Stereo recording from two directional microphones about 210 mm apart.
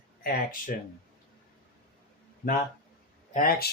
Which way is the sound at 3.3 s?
40° left (ahead or behind).